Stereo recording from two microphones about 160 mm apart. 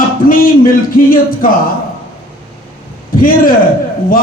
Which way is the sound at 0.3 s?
60° left (ahead or behind).